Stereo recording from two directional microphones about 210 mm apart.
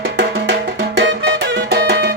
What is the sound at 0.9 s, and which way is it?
Music, 55° right (ahead or behind).